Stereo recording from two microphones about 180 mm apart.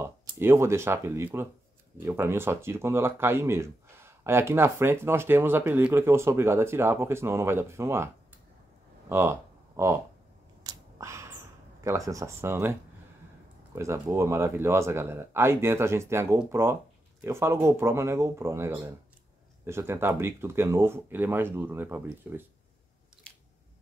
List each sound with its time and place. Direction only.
0.0 s speech: 15° right (ahead or behind)
9.1 s speech: 15° right (ahead or behind)
10.6 s scissors: 20° right (ahead or behind)
12.1 s speech: 15° right (ahead or behind)
13.7 s speech: 15° right (ahead or behind)